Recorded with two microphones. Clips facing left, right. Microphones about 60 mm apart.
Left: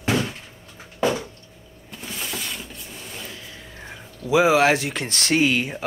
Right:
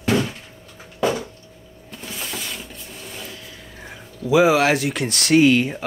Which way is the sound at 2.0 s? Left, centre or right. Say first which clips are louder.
Even; centre.